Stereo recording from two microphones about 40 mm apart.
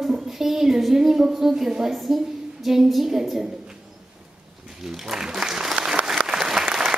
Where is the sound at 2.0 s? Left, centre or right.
Centre.